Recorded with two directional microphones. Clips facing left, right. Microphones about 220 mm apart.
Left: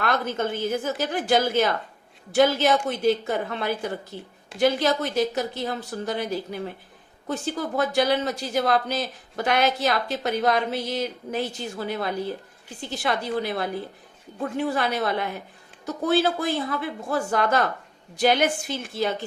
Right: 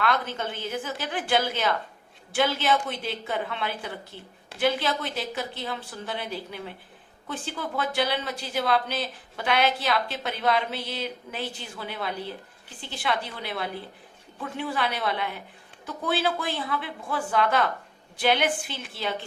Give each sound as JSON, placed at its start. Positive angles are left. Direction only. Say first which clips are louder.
{"t": 0.0, "sound": "a woman's voice", "louder": "left 3 dB", "side_deg": 45}